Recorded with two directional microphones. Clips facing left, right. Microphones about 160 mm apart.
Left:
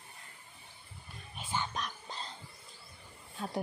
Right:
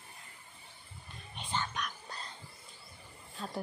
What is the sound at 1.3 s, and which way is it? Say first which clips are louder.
Music: even; 5° left (ahead or behind).